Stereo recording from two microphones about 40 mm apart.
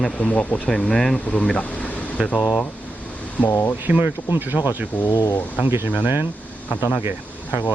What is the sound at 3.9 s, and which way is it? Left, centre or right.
Speech, right.